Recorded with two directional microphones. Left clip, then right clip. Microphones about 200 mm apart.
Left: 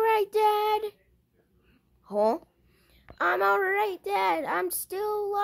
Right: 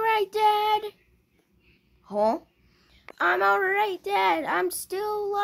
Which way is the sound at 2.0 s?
40° left (ahead or behind).